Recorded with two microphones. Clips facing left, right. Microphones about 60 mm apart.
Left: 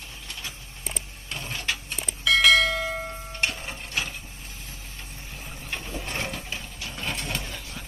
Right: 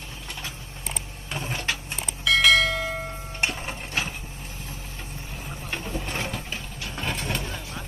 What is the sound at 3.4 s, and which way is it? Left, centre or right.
Printer, right.